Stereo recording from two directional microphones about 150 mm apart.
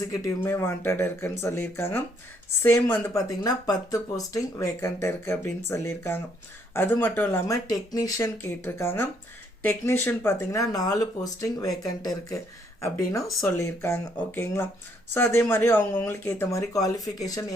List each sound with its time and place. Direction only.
0.0 s speech: 25° left (ahead or behind)